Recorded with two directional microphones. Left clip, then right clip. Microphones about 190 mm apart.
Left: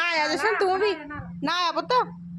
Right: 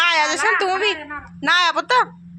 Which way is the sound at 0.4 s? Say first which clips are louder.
Right 4 dB; 10° left (ahead or behind).